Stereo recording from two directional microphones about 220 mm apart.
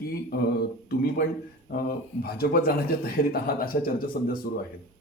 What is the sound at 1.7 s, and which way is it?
A man's voice, 45° left (ahead or behind).